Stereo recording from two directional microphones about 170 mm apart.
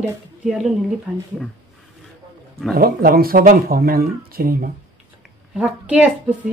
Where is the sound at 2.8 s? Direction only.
60° right (ahead or behind).